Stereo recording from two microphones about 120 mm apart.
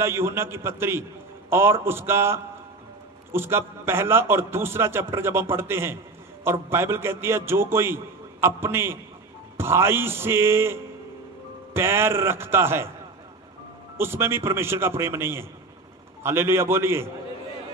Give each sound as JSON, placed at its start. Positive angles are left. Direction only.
{"t": 0.0, "sound": "a man's voice", "side_deg": -20}
{"t": 13.9, "sound": "a man's voice", "side_deg": -20}